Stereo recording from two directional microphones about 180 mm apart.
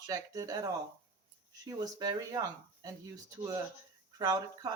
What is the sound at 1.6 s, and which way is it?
Speech, 20° right (ahead or behind).